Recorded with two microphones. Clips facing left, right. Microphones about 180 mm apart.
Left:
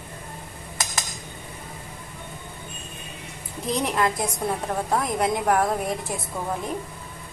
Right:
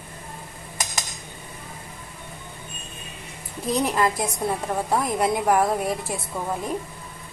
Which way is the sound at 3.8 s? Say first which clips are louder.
Right 1 dB; 5° right (ahead or behind).